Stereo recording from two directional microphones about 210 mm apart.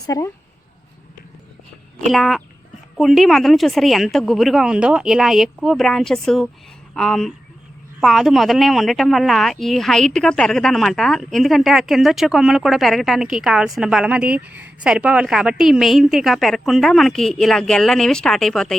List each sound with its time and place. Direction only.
0.0 s speech: 15° left (ahead or behind)
2.0 s speech: centre (ahead or behind)